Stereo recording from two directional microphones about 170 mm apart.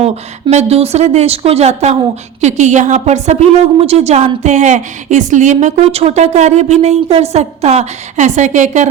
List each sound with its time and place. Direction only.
0.0 s a woman's voice: 40° right (ahead or behind)